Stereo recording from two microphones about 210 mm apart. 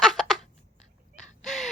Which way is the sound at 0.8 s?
35° left (ahead or behind).